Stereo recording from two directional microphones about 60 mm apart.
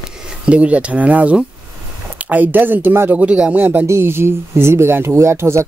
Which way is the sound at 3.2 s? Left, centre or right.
Right.